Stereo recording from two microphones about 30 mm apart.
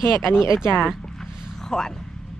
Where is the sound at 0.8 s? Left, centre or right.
Centre.